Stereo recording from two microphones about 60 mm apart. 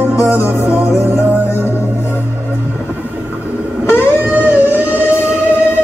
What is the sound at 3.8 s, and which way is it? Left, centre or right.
Guitar, left.